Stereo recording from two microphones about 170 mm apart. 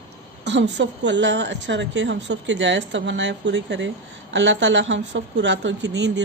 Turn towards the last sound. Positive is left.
turn(degrees=-90)